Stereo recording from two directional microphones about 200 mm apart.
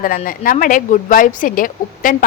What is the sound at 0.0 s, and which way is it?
A woman's voice, 45° left (ahead or behind).